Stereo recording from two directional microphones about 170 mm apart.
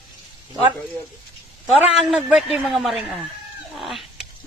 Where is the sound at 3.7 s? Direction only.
Centre (ahead or behind).